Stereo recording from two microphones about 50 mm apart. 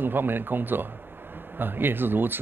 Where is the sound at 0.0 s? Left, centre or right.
Right.